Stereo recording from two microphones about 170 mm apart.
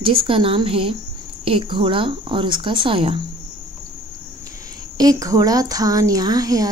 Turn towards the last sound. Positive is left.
turn(degrees=-20)  # may be behind; listen again after turning